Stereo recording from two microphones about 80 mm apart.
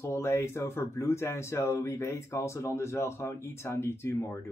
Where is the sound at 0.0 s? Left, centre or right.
Left.